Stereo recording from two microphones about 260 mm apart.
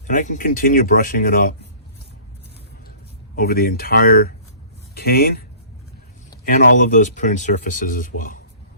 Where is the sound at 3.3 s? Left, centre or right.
Left.